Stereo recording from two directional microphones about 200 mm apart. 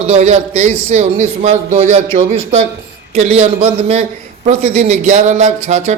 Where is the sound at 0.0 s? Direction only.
35° right (ahead or behind).